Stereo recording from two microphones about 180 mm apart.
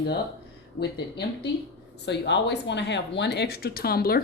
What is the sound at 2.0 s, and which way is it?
Speech, 70° left (ahead or behind).